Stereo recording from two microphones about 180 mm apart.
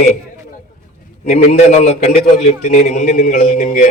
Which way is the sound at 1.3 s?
40° left (ahead or behind).